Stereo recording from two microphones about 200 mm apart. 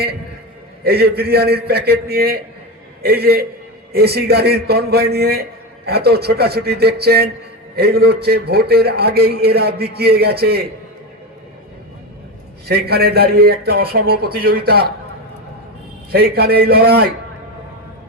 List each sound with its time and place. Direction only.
0.9 s a man's voice: 50° right (ahead or behind)
12.6 s a man's voice: 50° right (ahead or behind)
16.1 s a man's voice: 50° right (ahead or behind)